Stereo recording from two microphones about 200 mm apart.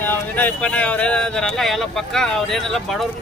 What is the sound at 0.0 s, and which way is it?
Speech, 10° left (ahead or behind).